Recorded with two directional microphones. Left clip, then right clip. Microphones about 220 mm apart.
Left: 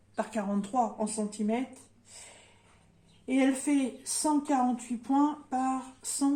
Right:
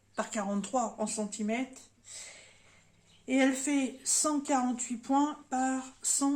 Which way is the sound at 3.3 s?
35° right (ahead or behind).